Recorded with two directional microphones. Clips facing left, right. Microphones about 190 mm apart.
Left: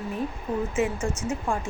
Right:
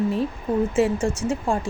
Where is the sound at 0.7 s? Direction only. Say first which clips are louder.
Right 5 dB; 30° right (ahead or behind).